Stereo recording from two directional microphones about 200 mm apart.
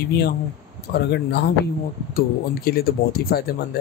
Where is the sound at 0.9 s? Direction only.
55° left (ahead or behind).